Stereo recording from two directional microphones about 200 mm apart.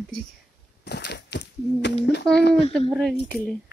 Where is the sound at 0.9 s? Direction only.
55° left (ahead or behind).